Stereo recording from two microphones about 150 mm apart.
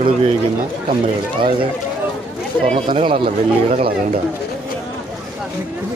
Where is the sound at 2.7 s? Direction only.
40° right (ahead or behind).